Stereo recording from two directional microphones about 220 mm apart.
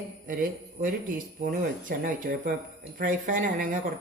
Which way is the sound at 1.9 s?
40° right (ahead or behind).